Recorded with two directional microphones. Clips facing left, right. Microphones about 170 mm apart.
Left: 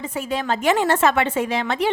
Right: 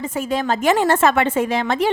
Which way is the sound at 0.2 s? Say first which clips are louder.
Right 3 dB; 45° right (ahead or behind).